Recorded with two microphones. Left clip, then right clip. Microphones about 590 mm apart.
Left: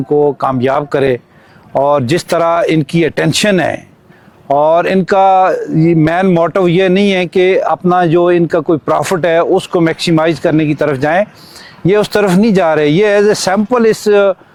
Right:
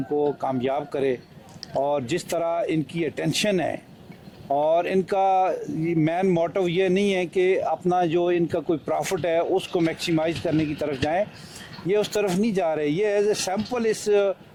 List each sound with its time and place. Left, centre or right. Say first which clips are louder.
0.2 s speech: left 12 dB; left